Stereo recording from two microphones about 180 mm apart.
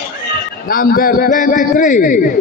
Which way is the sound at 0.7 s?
50° left (ahead or behind).